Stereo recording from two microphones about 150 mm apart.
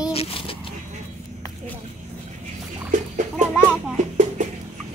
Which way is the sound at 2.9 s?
55° right (ahead or behind).